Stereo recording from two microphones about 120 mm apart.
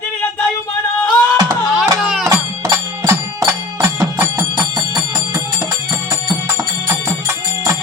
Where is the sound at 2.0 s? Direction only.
5° right (ahead or behind).